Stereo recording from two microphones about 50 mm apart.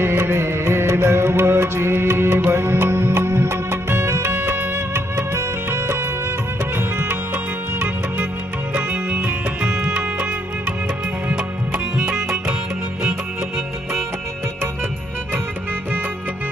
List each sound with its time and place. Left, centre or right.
0.0 s music: right
4.7 s music: right
8.7 s music: right